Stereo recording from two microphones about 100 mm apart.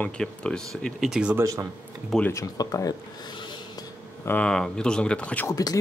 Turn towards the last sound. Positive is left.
turn(degrees=35)  # may be behind; listen again after turning